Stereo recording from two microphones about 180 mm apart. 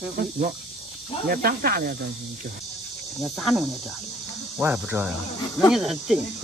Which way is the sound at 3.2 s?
Centre (ahead or behind).